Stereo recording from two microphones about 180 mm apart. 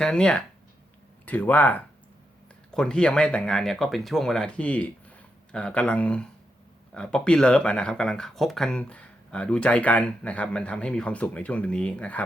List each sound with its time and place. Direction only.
0.0 s speech: 5° left (ahead or behind)